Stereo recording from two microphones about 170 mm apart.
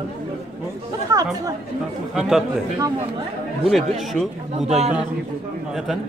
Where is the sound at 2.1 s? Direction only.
5° right (ahead or behind).